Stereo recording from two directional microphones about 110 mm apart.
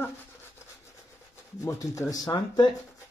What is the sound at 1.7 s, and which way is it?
A man's voice, 30° left (ahead or behind).